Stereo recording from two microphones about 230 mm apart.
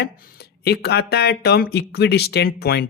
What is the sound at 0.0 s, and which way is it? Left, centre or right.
Speech, left.